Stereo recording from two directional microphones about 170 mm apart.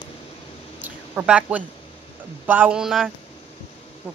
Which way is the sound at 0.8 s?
10° right (ahead or behind).